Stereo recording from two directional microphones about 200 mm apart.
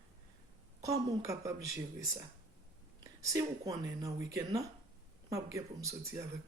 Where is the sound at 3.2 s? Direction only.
15° right (ahead or behind).